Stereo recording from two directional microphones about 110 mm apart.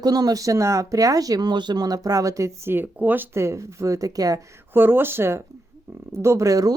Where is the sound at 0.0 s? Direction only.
35° right (ahead or behind).